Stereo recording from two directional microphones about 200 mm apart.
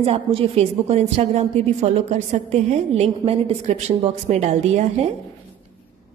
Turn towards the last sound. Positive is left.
turn(degrees=-35)  # may be behind; listen again after turning